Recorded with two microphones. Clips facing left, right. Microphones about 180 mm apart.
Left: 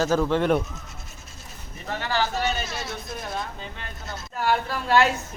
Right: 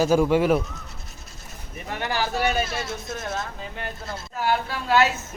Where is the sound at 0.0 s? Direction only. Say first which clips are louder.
Right 3 dB; 10° right (ahead or behind).